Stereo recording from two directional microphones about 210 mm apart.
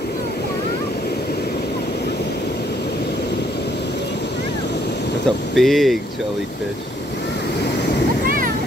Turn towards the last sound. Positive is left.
turn(degrees=55)  # may be behind; listen again after turning